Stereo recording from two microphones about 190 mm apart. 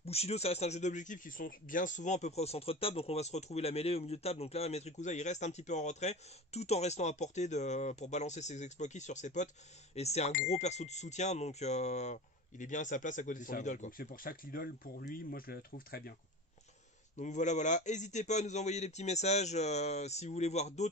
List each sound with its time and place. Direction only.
0.0 s a man's voice: 35° left (ahead or behind); by 16.0 s 50° left (ahead or behind)
17.2 s a man's voice: 40° left (ahead or behind)